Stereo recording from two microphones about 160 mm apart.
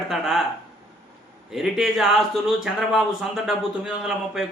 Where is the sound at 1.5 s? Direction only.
5° right (ahead or behind).